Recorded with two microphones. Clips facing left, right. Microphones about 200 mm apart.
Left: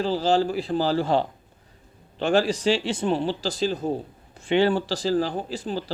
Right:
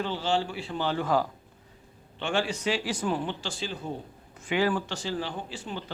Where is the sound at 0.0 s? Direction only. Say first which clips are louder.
Left 7 dB; 35° left (ahead or behind).